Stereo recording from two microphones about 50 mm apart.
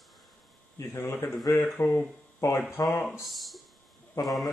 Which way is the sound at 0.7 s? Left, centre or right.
Left.